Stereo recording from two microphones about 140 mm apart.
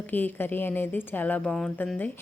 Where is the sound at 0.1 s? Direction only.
15° left (ahead or behind).